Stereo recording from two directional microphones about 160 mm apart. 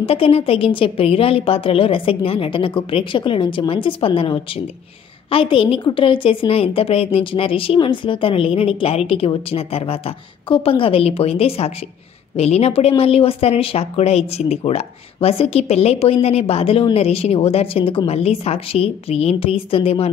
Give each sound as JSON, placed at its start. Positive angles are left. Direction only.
{"t": 0.0, "sound": "speech", "side_deg": 35}